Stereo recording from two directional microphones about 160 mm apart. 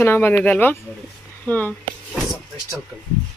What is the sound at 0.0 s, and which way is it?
Speech, 15° left (ahead or behind).